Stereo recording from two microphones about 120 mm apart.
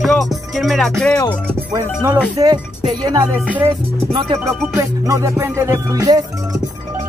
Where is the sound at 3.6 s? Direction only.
55° right (ahead or behind).